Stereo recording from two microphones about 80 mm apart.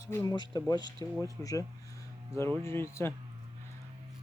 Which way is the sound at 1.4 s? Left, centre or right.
Left.